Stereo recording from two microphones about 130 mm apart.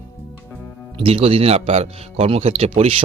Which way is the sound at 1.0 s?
45° right (ahead or behind).